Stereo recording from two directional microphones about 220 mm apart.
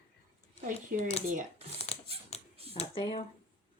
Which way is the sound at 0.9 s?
40° right (ahead or behind).